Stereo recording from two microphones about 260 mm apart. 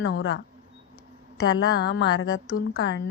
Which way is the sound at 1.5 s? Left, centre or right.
Left.